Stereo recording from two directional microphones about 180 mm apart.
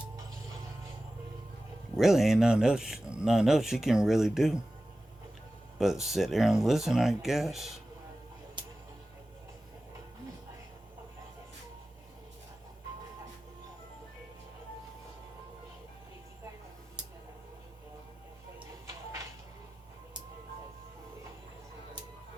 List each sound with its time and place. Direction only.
2.0 s speech: centre (ahead or behind)
5.8 s speech: centre (ahead or behind)